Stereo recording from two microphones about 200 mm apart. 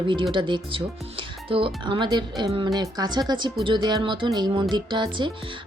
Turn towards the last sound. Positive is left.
turn(degrees=-25)  # may be behind; listen again after turning